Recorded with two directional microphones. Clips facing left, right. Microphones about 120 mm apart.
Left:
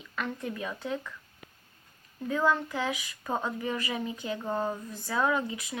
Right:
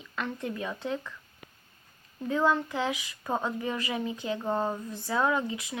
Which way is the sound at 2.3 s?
15° right (ahead or behind).